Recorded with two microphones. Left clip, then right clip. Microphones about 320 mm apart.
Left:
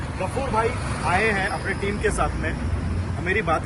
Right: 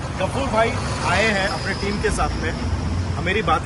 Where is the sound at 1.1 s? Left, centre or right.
Centre.